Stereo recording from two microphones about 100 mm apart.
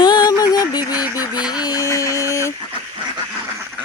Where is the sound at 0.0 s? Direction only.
45° left (ahead or behind).